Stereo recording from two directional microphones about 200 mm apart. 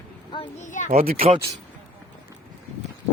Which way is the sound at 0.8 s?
45° right (ahead or behind).